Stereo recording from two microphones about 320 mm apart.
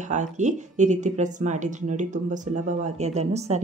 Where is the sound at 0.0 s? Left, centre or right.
Right.